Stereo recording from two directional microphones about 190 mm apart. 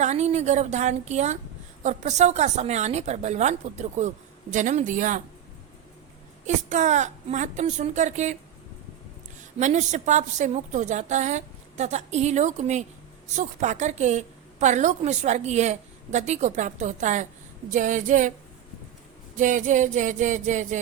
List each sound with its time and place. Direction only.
0.0 s a woman's voice: 35° right (ahead or behind)
6.4 s a woman's voice: 40° right (ahead or behind)
9.4 s a woman's voice: 40° right (ahead or behind)
19.4 s a woman's voice: 40° right (ahead or behind)